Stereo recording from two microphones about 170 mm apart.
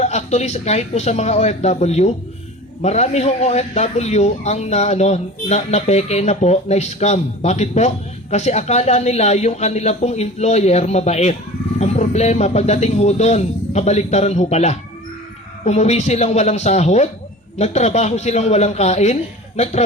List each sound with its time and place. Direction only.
0.0 s a man's voice: 40° left (ahead or behind)